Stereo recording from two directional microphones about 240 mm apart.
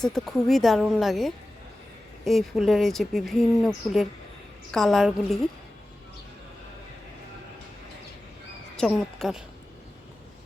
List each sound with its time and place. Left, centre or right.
0.0 s speech: centre
8.7 s a woman's voice: centre